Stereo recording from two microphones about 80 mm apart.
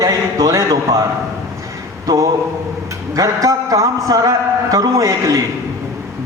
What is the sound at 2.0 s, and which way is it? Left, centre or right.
Speech, right.